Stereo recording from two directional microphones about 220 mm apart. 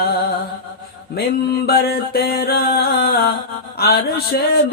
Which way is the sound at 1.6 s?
45° left (ahead or behind).